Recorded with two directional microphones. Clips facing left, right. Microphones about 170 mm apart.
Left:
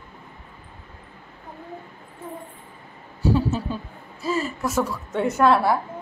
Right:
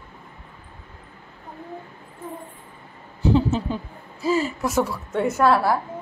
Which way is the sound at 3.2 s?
20° right (ahead or behind).